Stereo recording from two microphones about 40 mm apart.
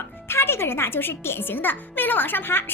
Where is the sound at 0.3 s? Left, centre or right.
Left.